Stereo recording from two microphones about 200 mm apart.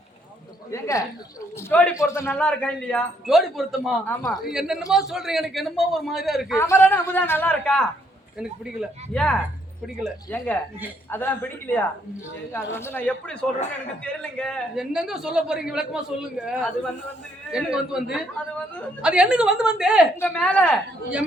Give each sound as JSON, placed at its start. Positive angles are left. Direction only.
{"t": 0.7, "sound": "a man's voice", "side_deg": 15}
{"t": 4.1, "sound": "a man's voice", "side_deg": 15}
{"t": 4.4, "sound": "a man's voice", "side_deg": -5}
{"t": 6.6, "sound": "a man's voice", "side_deg": 15}
{"t": 20.1, "sound": "a man's voice", "side_deg": 10}